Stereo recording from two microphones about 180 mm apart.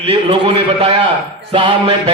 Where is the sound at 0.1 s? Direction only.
30° right (ahead or behind).